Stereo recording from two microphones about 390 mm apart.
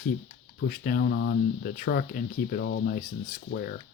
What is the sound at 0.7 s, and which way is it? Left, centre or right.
Speech, left.